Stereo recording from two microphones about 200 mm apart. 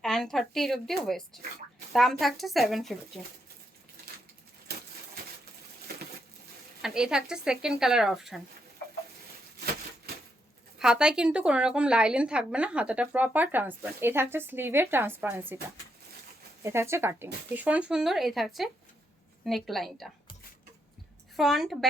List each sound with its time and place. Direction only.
0.0 s speech: centre (ahead or behind)
4.7 s a sound: 55° right (ahead or behind)
6.8 s speech: 5° right (ahead or behind)
10.8 s a woman's voice: 5° right (ahead or behind)
16.6 s a woman's voice: 15° right (ahead or behind)
21.3 s speech: centre (ahead or behind)